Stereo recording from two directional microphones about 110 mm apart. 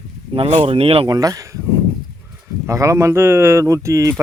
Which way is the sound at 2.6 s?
30° right (ahead or behind).